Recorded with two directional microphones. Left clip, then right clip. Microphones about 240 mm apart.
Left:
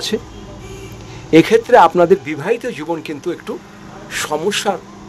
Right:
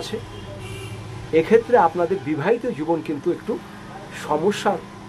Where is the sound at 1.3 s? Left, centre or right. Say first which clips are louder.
Left 6 dB; left.